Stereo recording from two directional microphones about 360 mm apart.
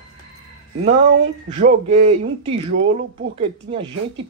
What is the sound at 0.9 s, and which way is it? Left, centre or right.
Speech, right.